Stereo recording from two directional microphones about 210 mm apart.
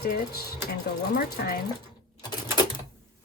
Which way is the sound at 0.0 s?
45° left (ahead or behind).